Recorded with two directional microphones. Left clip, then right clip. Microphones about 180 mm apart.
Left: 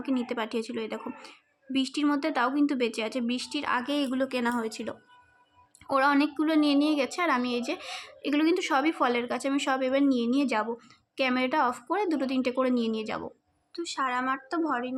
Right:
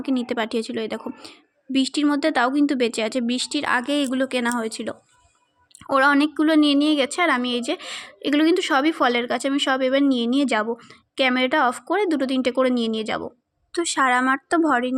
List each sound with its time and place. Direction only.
0.0 s a woman's voice: 25° right (ahead or behind)
13.7 s speech: 45° right (ahead or behind)